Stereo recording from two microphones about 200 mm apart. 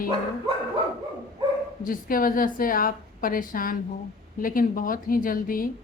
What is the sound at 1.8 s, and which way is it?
Speech, 45° left (ahead or behind).